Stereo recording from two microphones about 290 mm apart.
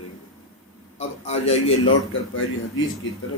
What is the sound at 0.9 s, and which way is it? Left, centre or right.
Speech, left.